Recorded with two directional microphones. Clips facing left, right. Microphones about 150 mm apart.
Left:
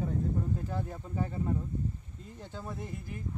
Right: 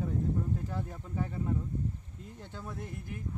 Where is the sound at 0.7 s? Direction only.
15° left (ahead or behind).